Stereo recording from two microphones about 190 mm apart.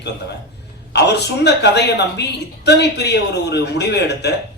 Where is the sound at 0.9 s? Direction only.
60° left (ahead or behind).